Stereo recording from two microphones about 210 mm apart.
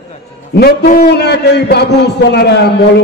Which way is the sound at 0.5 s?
50° left (ahead or behind).